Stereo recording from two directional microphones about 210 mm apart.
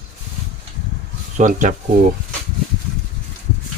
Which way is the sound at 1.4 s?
35° right (ahead or behind).